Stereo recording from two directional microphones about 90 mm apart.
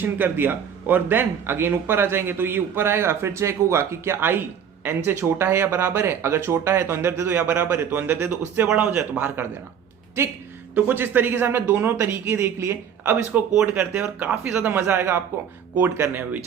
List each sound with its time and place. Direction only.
0.0 s a man's voice: 20° right (ahead or behind)
10.8 s speech: 20° right (ahead or behind)